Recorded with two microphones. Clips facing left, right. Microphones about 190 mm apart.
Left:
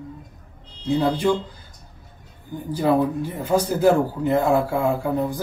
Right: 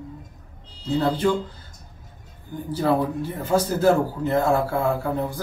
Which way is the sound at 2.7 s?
15° left (ahead or behind).